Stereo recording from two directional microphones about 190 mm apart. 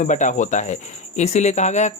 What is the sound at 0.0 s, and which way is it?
Speech, 40° left (ahead or behind).